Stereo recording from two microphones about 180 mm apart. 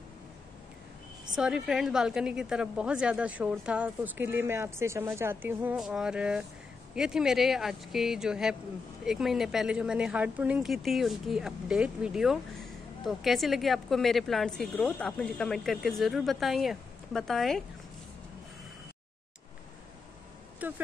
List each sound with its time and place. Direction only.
1.3 s a woman's voice: 5° right (ahead or behind)
20.6 s a woman's voice: 10° right (ahead or behind)